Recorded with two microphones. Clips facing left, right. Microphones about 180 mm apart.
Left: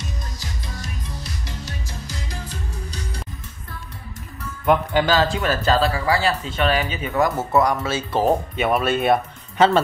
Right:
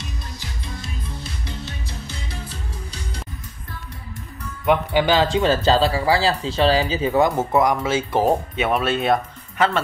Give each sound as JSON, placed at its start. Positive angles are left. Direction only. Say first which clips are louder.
{"t": 0.4, "sound": "music", "louder": "even", "side_deg": 40}
{"t": 5.0, "sound": "speech", "louder": "right 2 dB", "side_deg": -15}
{"t": 7.2, "sound": "speech", "louder": "right 1 dB", "side_deg": -10}
{"t": 8.3, "sound": "speech", "louder": "even", "side_deg": 0}